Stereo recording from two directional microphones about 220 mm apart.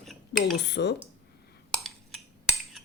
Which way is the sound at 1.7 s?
Centre (ahead or behind).